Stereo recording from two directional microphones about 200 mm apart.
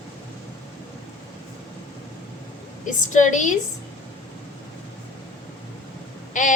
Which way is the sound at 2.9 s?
40° left (ahead or behind).